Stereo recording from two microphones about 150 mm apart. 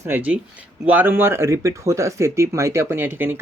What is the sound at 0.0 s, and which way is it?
Speech, 10° right (ahead or behind).